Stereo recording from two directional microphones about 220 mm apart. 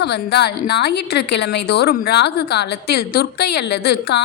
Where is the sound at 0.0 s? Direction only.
50° left (ahead or behind).